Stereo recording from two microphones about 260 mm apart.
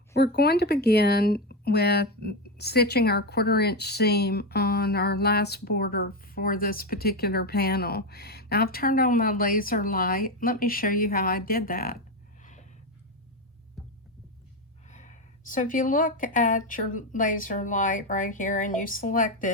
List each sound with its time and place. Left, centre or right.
0.1 s speech: left
12.4 s a sound: left
14.8 s speech: left